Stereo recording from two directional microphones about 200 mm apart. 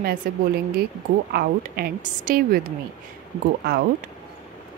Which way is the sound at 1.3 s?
50° right (ahead or behind).